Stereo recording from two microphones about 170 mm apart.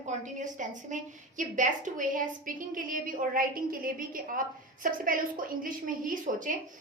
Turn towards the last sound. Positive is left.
turn(degrees=-50)  # may be behind; listen again after turning